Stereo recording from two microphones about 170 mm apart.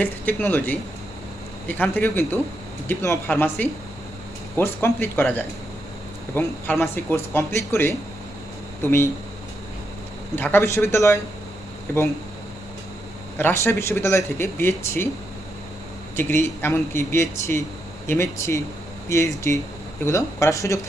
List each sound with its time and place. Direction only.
0.0 s speech: 10° left (ahead or behind)
10.3 s speech: 15° left (ahead or behind)
13.4 s speech: 10° left (ahead or behind)
16.2 s speech: 15° left (ahead or behind)